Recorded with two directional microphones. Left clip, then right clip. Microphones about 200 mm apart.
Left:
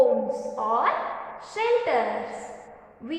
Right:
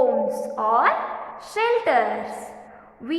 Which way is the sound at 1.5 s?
40° right (ahead or behind).